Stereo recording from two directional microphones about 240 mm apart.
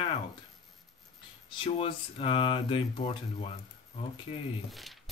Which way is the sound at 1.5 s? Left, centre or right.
Left.